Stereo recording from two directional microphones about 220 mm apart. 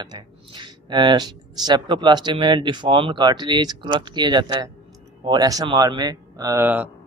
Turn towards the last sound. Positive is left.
turn(degrees=-5)  # may be behind; listen again after turning